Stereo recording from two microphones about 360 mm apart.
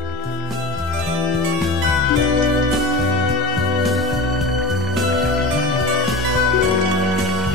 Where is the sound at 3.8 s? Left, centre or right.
Centre.